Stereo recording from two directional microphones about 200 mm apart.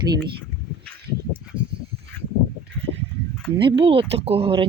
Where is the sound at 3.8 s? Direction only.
25° right (ahead or behind).